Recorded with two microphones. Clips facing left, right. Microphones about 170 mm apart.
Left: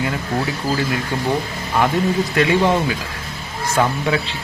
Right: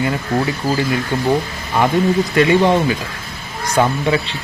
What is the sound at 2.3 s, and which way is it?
Speech, centre (ahead or behind).